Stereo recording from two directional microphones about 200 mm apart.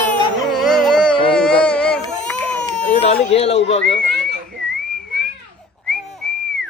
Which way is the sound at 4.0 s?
50° right (ahead or behind).